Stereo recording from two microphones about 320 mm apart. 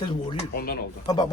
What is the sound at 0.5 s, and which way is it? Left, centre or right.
Speech, left.